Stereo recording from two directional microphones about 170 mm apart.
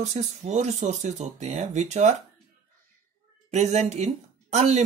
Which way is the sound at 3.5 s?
40° right (ahead or behind).